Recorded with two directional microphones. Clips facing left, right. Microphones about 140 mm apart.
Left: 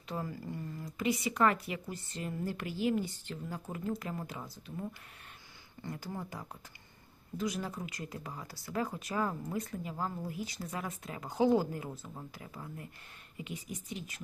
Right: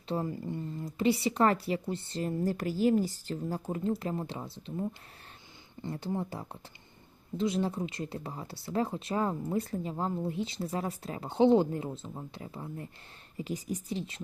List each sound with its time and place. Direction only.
0.1 s a woman's voice: 25° right (ahead or behind)